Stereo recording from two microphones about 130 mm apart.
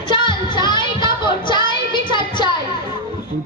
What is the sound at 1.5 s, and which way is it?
Music, 35° left (ahead or behind).